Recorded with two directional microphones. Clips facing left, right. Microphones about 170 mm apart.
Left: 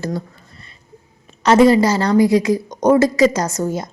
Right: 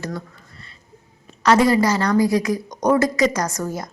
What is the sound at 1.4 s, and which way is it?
A woman's voice, 25° left (ahead or behind).